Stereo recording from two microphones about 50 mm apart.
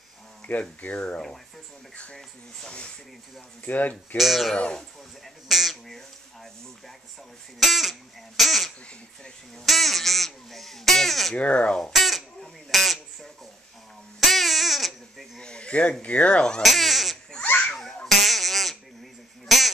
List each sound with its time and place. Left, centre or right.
0.5 s speech: left
3.6 s speech: left
4.2 s speech: centre
7.6 s speech: centre
11.3 s speech: left
11.9 s speech: centre
14.2 s babbling: centre
15.4 s speech: centre
16.6 s speech: centre
18.0 s a sound: centre